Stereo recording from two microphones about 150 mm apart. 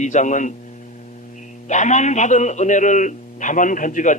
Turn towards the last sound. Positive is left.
turn(degrees=60)  # may be behind; listen again after turning